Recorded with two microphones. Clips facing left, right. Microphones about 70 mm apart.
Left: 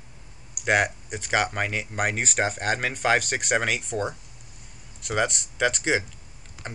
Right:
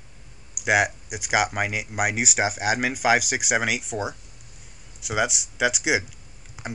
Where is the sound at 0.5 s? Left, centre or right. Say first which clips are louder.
Right 1 dB; centre.